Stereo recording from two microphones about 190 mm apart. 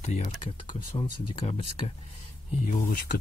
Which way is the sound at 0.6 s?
25° left (ahead or behind).